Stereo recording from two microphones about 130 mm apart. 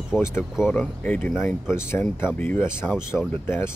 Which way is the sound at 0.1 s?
5° left (ahead or behind).